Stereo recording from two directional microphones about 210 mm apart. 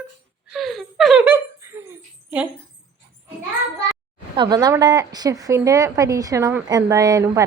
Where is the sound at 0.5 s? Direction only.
Centre (ahead or behind).